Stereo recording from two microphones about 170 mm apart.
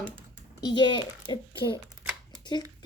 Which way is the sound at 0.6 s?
25° left (ahead or behind).